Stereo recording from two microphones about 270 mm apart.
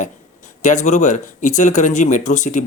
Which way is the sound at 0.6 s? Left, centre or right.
Left.